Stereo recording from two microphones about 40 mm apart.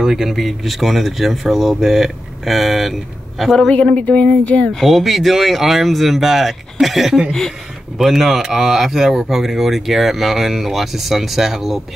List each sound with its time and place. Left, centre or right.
0.0 s speech: centre
4.1 s speech: left
4.8 s speech: centre
8.4 s speech: centre
8.6 s speech: centre